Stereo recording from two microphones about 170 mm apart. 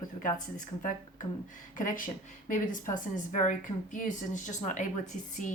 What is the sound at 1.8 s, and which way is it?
Speech, 50° left (ahead or behind).